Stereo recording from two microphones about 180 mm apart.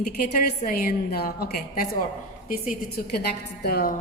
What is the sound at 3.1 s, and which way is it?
Speech, 60° left (ahead or behind).